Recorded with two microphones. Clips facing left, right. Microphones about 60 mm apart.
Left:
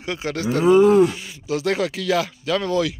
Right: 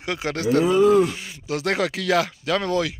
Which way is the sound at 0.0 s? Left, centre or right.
Right.